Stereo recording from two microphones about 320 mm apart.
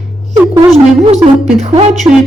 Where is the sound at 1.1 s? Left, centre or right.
Centre.